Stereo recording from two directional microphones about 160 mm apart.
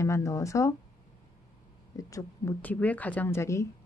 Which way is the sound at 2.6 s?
10° left (ahead or behind).